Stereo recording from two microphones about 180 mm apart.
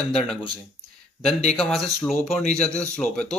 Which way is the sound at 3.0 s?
5° left (ahead or behind).